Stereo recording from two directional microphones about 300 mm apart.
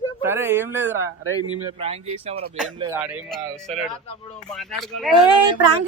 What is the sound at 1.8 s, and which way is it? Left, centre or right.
Speech, centre.